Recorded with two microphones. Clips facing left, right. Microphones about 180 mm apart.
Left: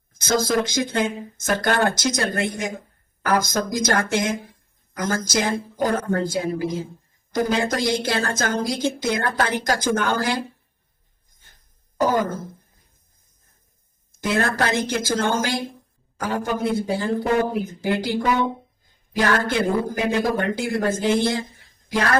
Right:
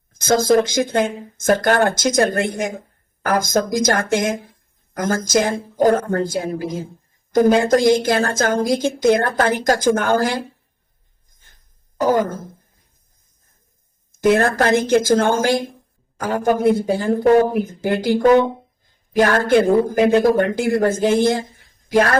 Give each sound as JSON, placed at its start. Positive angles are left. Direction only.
{"t": 0.2, "sound": "a woman's voice", "side_deg": -50}
{"t": 11.9, "sound": "a woman's voice", "side_deg": -50}
{"t": 14.2, "sound": "a woman's voice", "side_deg": -50}